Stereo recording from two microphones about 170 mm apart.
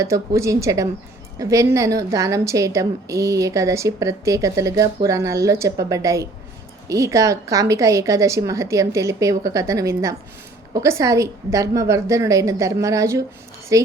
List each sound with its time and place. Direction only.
0.0 s a woman's voice: 15° right (ahead or behind)